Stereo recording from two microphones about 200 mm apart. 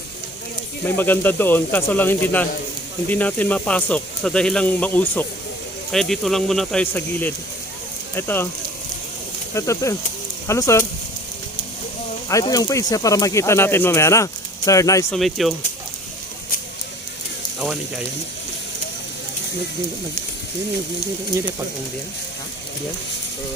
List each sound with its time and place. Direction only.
0.9 s speech: 10° left (ahead or behind)
9.6 s speech: 15° left (ahead or behind)
12.3 s speech: 20° left (ahead or behind)
15.1 s speech: centre (ahead or behind)